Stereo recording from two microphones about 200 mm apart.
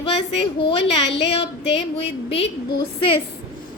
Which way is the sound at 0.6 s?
25° left (ahead or behind).